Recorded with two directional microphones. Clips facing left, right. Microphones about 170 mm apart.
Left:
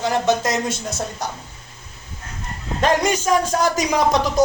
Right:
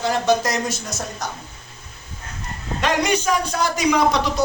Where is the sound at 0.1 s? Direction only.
20° left (ahead or behind).